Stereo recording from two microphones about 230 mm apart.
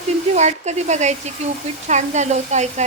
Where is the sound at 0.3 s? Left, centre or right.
Right.